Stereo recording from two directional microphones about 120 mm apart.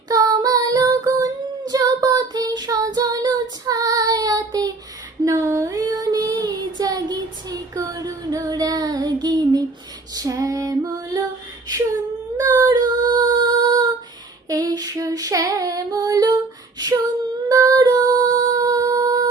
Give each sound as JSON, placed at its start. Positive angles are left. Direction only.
{"t": 0.1, "sound": "female singing", "side_deg": -30}
{"t": 3.7, "sound": "child singing", "side_deg": -30}
{"t": 10.2, "sound": "female singing", "side_deg": -30}
{"t": 12.4, "sound": "child singing", "side_deg": -35}
{"t": 14.5, "sound": "female singing", "side_deg": -35}
{"t": 17.5, "sound": "music", "side_deg": -30}